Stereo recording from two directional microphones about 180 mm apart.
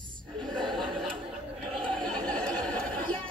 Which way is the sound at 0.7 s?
Centre (ahead or behind).